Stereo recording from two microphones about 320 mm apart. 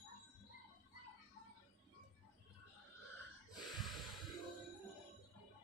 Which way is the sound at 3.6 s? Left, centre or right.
Centre.